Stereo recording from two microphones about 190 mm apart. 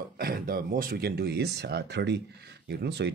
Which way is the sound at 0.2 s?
50° right (ahead or behind).